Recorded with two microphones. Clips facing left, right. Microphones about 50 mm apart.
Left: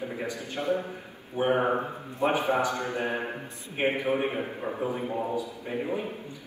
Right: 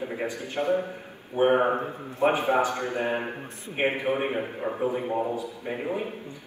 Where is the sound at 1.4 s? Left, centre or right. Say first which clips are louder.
Right 4 dB; right.